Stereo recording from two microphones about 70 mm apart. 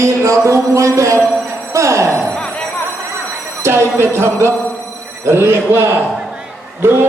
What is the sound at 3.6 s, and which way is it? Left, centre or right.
Speech, right.